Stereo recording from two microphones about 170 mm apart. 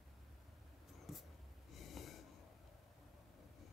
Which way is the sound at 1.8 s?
Centre (ahead or behind).